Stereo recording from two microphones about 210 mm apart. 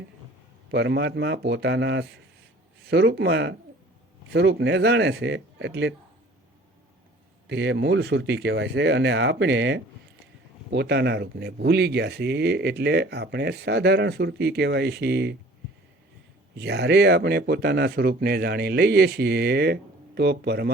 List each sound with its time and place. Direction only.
0.7 s speech: 55° right (ahead or behind)
7.4 s speech: 55° right (ahead or behind)
16.6 s speech: 55° right (ahead or behind)